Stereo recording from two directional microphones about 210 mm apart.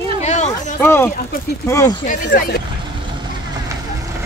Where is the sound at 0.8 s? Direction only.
10° left (ahead or behind).